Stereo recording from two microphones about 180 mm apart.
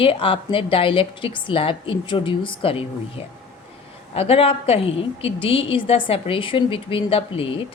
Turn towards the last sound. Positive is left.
turn(degrees=30)  # may be behind; listen again after turning